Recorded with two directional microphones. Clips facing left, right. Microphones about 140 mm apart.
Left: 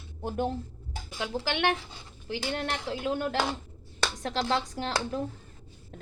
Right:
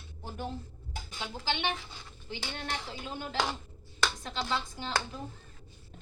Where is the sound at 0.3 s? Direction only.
60° left (ahead or behind).